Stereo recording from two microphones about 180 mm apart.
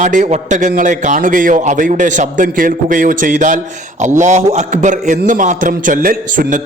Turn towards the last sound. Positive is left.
turn(degrees=-50)  # may be behind; listen again after turning